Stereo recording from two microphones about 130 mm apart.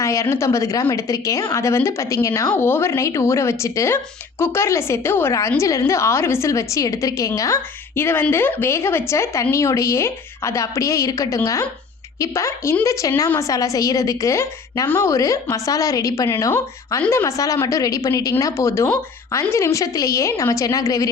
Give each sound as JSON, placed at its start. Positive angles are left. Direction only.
{"t": 0.0, "sound": "a woman's voice", "side_deg": 25}